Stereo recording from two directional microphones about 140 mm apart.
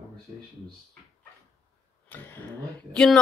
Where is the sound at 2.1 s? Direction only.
15° left (ahead or behind).